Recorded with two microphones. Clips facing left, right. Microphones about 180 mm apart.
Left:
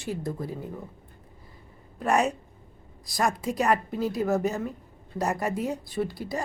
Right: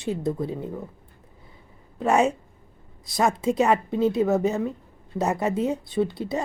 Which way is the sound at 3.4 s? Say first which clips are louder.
Right 4 dB; 25° right (ahead or behind).